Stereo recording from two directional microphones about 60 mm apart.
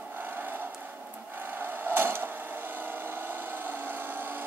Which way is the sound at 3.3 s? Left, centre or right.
Right.